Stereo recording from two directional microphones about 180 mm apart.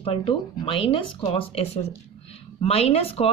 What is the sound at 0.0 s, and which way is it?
A woman's voice, 30° left (ahead or behind).